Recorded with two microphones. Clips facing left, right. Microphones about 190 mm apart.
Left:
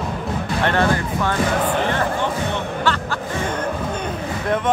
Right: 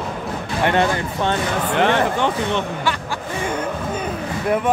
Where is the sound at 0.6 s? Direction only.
20° right (ahead or behind).